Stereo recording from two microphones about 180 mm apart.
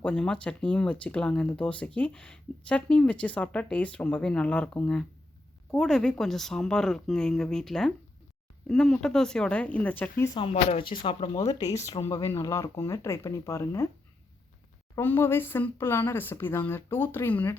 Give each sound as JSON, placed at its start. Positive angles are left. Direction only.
{"t": 0.0, "sound": "speech", "side_deg": 5}
{"t": 10.3, "sound": "speech", "side_deg": 35}
{"t": 11.3, "sound": "speech", "side_deg": 20}
{"t": 14.9, "sound": "speech", "side_deg": 10}